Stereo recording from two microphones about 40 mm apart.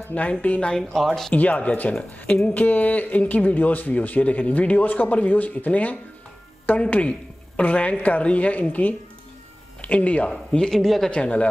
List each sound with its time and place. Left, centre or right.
0.1 s speech: left
0.8 s speech: centre
1.3 s speech: left
7.0 s a sound: left
7.6 s speech: left
10.7 s speech: centre
11.1 s speech: left